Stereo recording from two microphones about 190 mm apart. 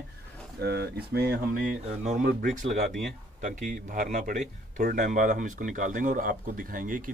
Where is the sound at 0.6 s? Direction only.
60° right (ahead or behind).